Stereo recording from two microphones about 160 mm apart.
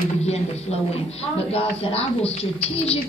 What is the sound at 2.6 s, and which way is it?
Speech, 40° left (ahead or behind).